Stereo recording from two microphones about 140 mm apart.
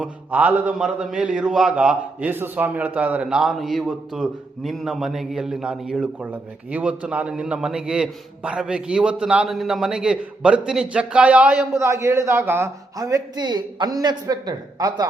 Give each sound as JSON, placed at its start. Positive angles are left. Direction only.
{"t": 0.0, "sound": "a man's voice", "side_deg": -10}
{"t": 11.7, "sound": "a man's voice", "side_deg": -20}